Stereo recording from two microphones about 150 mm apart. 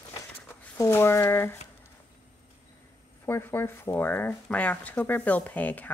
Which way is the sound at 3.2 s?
15° left (ahead or behind).